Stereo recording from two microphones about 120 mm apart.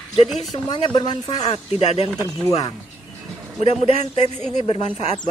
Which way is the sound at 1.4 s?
60° left (ahead or behind).